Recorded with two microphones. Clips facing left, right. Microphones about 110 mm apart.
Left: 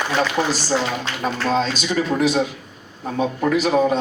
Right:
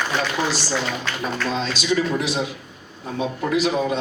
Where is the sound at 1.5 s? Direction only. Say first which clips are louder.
Left 1 dB; 45° left (ahead or behind).